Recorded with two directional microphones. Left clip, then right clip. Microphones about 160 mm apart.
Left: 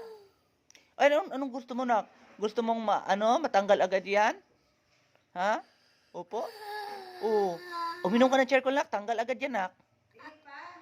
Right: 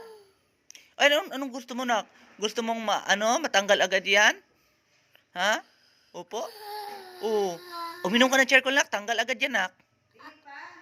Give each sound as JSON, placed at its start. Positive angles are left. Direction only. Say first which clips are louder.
{"t": 0.7, "sound": "a man's voice", "louder": "right 2 dB", "side_deg": 15}
{"t": 6.8, "sound": "baby cry", "louder": "right 1 dB", "side_deg": 15}
{"t": 8.0, "sound": "a man's voice", "louder": "right 3 dB", "side_deg": 10}